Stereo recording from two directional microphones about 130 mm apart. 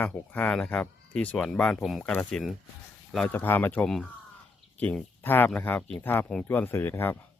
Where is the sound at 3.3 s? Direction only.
15° left (ahead or behind).